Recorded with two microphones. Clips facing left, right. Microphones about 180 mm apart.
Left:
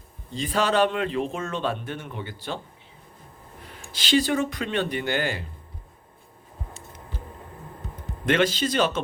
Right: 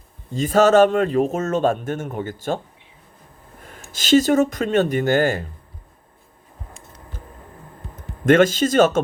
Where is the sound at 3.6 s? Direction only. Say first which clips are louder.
Right 3 dB; 45° right (ahead or behind).